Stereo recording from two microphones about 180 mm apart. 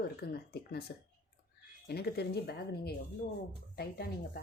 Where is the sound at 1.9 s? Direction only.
60° left (ahead or behind).